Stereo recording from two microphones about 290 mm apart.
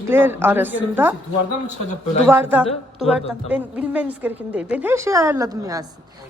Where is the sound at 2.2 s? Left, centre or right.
Centre.